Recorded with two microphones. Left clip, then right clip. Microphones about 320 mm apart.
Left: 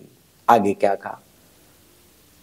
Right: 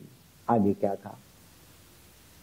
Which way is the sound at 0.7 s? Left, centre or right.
Centre.